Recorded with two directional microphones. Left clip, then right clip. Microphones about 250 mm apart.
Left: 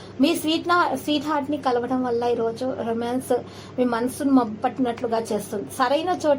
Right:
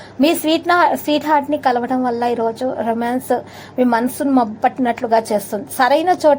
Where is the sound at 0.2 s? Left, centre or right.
Right.